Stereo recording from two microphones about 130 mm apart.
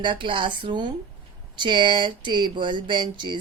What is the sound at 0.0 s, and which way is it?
Speech, 40° right (ahead or behind).